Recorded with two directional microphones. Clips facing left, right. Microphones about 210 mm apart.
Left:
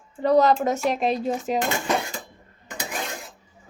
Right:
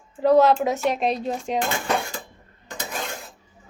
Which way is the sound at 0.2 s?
Centre (ahead or behind).